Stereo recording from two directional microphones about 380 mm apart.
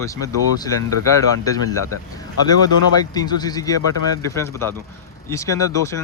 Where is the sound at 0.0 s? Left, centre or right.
Centre.